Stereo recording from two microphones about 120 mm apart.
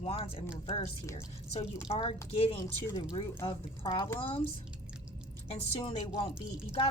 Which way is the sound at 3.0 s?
40° left (ahead or behind).